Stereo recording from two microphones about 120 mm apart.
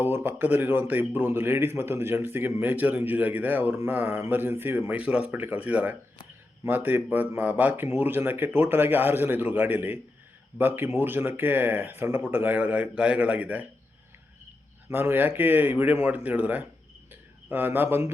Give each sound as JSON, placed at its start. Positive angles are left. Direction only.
{"t": 0.0, "sound": "speech", "side_deg": -20}
{"t": 14.8, "sound": "speech", "side_deg": -20}